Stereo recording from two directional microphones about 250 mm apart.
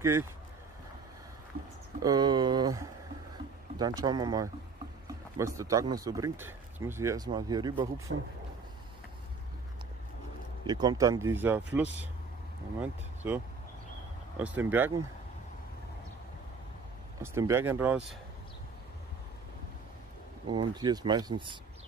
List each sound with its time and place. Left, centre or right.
0.0 s speech: centre
2.0 s speech: centre
10.7 s speech: centre
17.2 s speech: centre
20.4 s speech: centre